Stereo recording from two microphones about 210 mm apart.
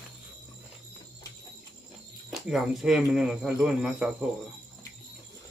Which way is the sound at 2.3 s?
Centre (ahead or behind).